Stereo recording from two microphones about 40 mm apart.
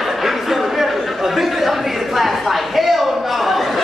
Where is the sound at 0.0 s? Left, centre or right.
Centre.